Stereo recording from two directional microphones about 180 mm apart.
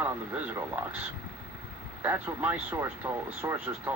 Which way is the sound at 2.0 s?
10° right (ahead or behind).